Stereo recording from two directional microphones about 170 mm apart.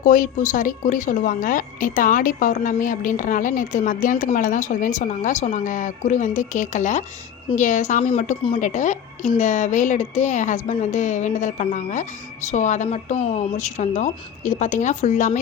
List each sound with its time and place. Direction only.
0.0 s a woman's voice: 50° left (ahead or behind)